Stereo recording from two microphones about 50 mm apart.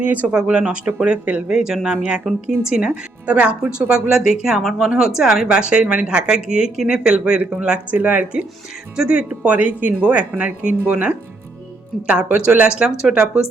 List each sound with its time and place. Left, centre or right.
0.0 s speech: right
0.3 s speech: centre
1.5 s speech: centre
3.2 s speech: right
7.9 s speech: right; by 13.4 s centre